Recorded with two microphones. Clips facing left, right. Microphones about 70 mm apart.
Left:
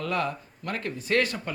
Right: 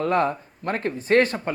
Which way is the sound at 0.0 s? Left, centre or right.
Right.